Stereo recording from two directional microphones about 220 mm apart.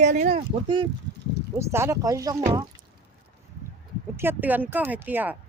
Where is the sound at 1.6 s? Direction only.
10° right (ahead or behind).